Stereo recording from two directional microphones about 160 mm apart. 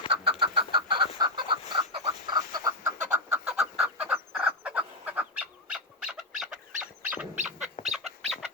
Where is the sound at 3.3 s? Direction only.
5° right (ahead or behind).